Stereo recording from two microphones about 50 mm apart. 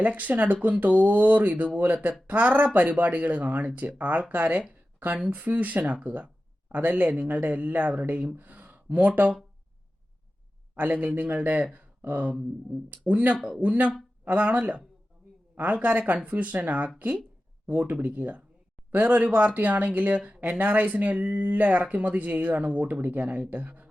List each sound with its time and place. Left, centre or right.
0.0 s speech: right
10.8 s speech: right